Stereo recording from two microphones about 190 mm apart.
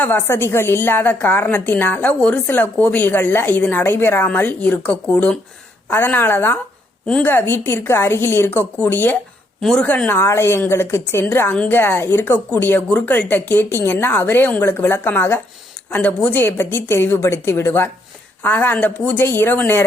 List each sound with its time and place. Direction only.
0.0 s a woman's voice: 10° left (ahead or behind)